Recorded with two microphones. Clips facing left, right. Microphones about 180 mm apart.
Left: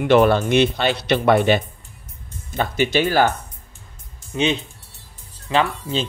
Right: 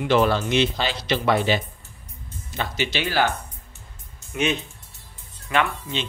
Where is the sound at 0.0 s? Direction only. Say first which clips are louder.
Left 5 dB; 55° left (ahead or behind).